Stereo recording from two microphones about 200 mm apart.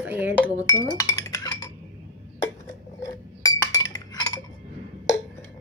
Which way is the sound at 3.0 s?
20° left (ahead or behind).